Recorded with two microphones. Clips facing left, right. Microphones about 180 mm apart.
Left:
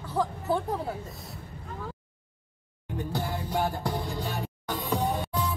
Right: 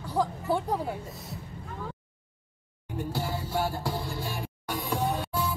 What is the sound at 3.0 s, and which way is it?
Music, 15° left (ahead or behind).